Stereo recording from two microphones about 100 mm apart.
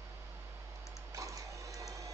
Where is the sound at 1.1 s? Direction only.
35° right (ahead or behind).